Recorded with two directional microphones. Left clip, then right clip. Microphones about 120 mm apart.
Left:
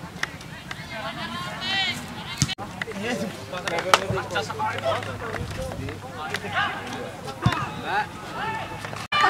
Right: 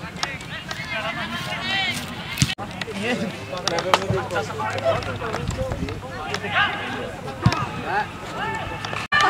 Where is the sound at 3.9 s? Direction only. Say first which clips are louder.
Left 2 dB; 35° left (ahead or behind).